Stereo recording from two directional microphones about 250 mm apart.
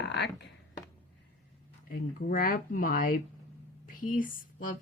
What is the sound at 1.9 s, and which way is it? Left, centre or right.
A woman's voice, left.